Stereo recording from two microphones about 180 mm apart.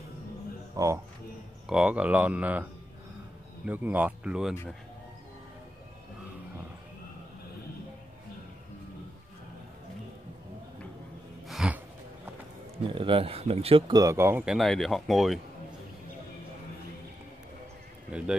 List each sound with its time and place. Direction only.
0.8 s speech: 20° right (ahead or behind)
1.7 s speech: 5° right (ahead or behind)
11.4 s gasp: 5° right (ahead or behind)
12.9 s speech: 30° right (ahead or behind); by 15.4 s centre (ahead or behind)
18.1 s speech: 5° right (ahead or behind)